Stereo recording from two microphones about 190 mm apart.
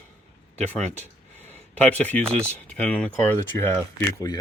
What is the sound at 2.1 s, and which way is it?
Speech, 5° left (ahead or behind).